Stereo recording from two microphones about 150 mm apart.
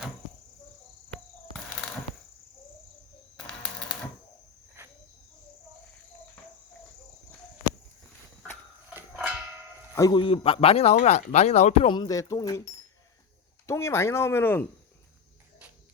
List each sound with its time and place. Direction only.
3.3 s typewriter: 5° left (ahead or behind)
4.8 s cricket: 15° right (ahead or behind)
8.9 s dog: 10° right (ahead or behind)
9.9 s a sound: 20° left (ahead or behind)
10.2 s speech: 35° left (ahead or behind)
11.9 s speech: 25° left (ahead or behind)